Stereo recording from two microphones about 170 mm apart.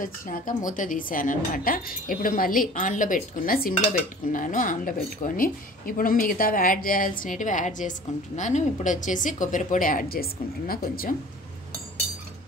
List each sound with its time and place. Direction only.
0.0 s a woman's voice: 50° left (ahead or behind)